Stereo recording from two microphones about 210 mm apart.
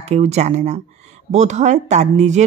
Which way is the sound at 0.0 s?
30° right (ahead or behind).